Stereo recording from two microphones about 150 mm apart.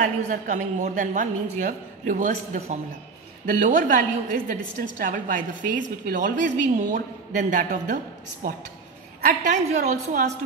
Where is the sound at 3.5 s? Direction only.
60° right (ahead or behind).